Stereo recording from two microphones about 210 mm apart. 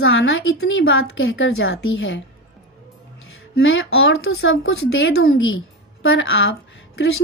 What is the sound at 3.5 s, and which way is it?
A woman's voice, 65° left (ahead or behind).